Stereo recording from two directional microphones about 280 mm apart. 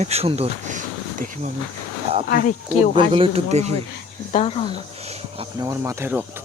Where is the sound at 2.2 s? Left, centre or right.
Left.